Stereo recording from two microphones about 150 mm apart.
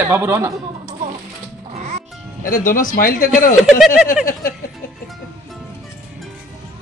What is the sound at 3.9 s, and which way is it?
Speech, 65° left (ahead or behind).